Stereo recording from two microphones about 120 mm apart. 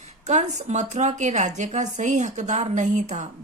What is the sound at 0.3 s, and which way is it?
A woman's voice, 80° right.